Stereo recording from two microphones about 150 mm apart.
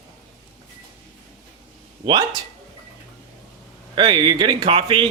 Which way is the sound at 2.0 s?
30° right (ahead or behind).